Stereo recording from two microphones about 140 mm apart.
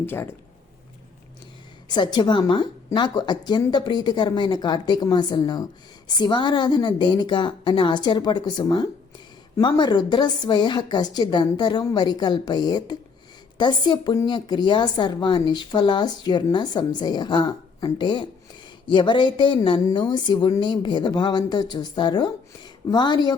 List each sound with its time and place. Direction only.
0.0 s speech: 15° left (ahead or behind)
1.9 s a woman's voice: 30° left (ahead or behind)